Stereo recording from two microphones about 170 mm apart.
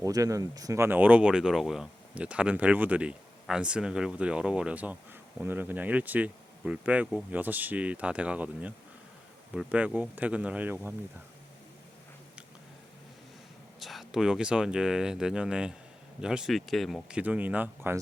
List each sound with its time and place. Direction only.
0.0 s speech: 20° right (ahead or behind)
13.7 s speech: centre (ahead or behind)